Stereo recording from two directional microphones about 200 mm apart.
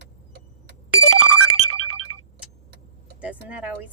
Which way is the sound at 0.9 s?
90° left.